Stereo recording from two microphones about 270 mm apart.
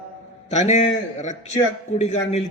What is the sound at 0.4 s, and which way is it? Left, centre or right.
A man's voice, left.